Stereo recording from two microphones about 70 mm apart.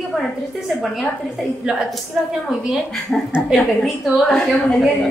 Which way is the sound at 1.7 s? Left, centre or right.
Centre.